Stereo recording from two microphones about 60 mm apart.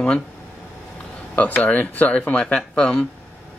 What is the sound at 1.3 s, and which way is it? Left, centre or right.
Speech, left.